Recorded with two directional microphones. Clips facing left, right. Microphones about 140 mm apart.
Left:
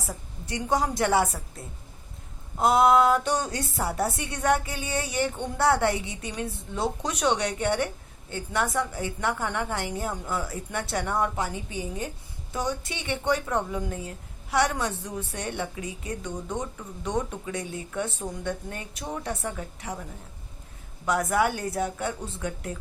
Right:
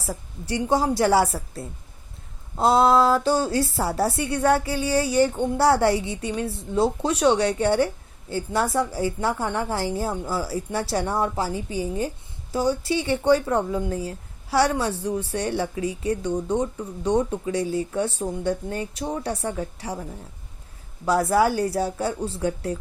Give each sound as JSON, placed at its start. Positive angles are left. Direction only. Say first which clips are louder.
{"t": 0.0, "sound": "speech", "louder": "right 5 dB", "side_deg": -30}
{"t": 21.1, "sound": "speech", "louder": "right 5 dB", "side_deg": -30}